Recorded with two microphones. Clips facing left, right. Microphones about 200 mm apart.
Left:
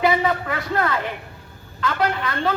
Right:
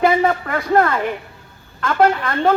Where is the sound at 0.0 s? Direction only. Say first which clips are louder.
Right 4 dB; 50° right (ahead or behind).